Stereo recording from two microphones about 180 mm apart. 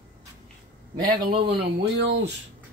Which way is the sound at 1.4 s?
65° right (ahead or behind).